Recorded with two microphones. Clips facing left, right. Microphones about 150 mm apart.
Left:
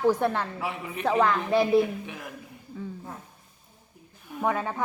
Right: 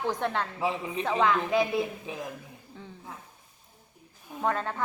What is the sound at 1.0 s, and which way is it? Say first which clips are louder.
Speech: left 3 dB; centre (ahead or behind).